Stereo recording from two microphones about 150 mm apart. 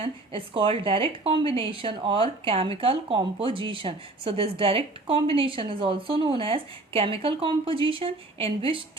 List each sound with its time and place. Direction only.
0.0 s a woman's voice: 35° right (ahead or behind)